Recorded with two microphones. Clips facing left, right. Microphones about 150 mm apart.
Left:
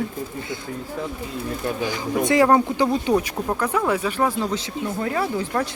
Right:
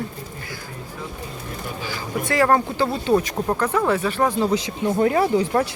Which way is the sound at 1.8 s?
20° left (ahead or behind).